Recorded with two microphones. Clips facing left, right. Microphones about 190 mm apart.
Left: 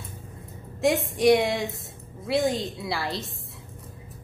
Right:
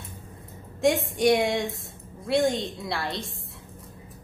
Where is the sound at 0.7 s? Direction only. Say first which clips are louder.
Even; centre (ahead or behind).